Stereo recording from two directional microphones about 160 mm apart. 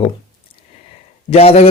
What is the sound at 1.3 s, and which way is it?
Speech, 40° left (ahead or behind).